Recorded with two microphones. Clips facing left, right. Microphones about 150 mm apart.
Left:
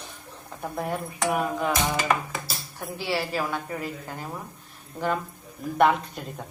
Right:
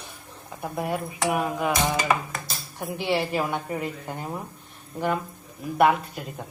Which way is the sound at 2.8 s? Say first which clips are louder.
Right 3 dB; 20° right (ahead or behind).